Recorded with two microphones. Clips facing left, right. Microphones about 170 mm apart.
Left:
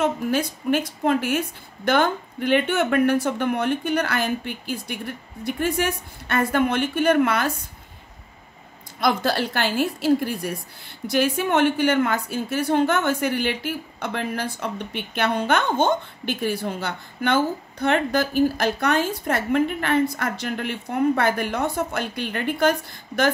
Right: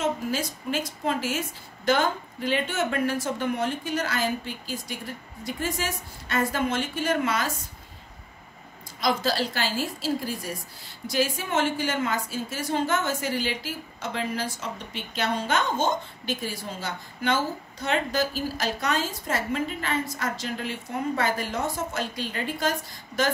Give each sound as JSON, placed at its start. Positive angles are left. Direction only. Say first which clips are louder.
{"t": 0.0, "sound": "a woman's voice", "louder": "left 5 dB", "side_deg": 60}
{"t": 9.0, "sound": "a woman's voice", "louder": "left 3 dB", "side_deg": 60}